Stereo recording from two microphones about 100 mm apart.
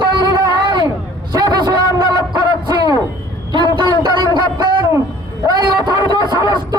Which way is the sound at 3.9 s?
50° right (ahead or behind).